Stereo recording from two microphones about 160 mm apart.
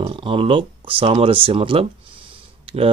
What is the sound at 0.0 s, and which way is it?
Speech, 35° right (ahead or behind).